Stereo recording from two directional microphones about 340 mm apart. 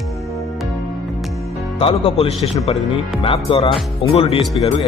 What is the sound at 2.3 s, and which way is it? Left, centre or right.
Speech, centre.